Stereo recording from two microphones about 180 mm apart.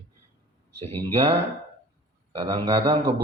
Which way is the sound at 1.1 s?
30° right (ahead or behind).